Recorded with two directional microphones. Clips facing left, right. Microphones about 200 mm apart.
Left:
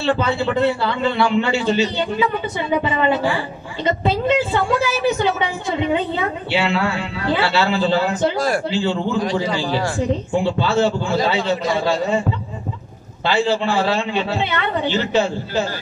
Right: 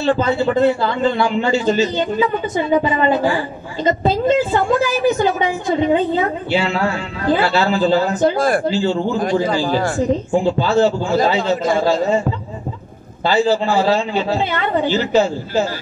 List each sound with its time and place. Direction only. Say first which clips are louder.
0.0 s a woman's voice: right 3 dB; 45° right (ahead or behind)
13.2 s a woman's voice: right 3 dB; 40° right (ahead or behind)